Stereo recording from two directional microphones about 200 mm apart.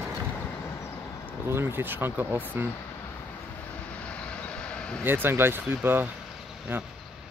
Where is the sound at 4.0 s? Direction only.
5° left (ahead or behind).